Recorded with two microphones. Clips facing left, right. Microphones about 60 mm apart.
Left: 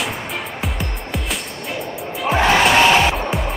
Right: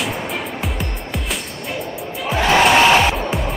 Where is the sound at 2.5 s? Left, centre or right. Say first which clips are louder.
Right 2 dB; centre.